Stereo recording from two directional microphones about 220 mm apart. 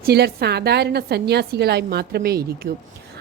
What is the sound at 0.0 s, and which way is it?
Speech, 45° right (ahead or behind).